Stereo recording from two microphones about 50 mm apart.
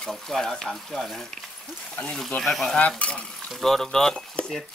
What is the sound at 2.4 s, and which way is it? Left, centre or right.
Speech, centre.